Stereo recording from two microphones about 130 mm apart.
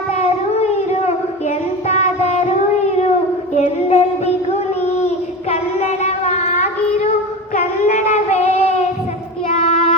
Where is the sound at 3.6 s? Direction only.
55° left (ahead or behind).